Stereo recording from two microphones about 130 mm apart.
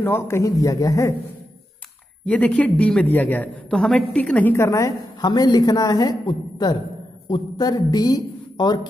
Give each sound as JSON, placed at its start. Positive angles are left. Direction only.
{"t": 0.0, "sound": "a man's voice", "side_deg": 20}
{"t": 2.2, "sound": "a man's voice", "side_deg": 10}